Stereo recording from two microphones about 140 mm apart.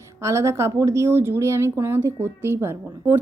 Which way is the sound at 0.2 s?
20° right (ahead or behind).